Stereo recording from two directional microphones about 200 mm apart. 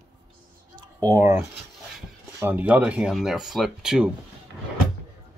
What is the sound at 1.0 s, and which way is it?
Speech, 15° right (ahead or behind).